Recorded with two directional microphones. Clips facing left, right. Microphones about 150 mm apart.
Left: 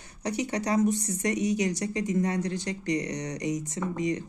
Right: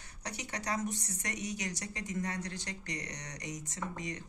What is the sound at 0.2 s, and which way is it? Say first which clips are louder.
Speech: left 12 dB; 20° left (ahead or behind).